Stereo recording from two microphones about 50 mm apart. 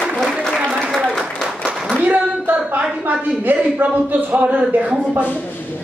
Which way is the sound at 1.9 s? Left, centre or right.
Right.